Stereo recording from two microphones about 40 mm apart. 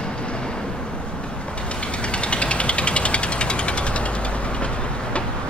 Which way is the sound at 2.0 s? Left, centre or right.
Left.